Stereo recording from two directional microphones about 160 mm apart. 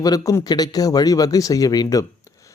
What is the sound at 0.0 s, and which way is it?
Speech, 20° left (ahead or behind).